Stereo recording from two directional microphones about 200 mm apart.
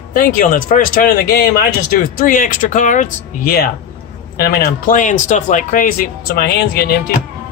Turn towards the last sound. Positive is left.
turn(degrees=45)  # may be behind; listen again after turning